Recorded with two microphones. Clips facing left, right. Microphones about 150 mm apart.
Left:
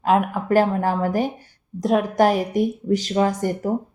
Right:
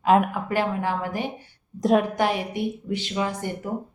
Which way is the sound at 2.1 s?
40° left (ahead or behind).